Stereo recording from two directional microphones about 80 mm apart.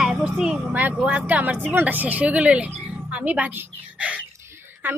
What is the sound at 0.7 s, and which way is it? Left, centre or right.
A woman's voice, right.